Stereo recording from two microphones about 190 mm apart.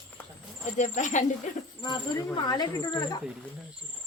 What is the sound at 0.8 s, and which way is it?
Speech, 40° left (ahead or behind).